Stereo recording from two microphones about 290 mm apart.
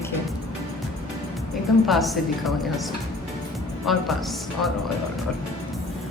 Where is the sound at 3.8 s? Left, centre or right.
Centre.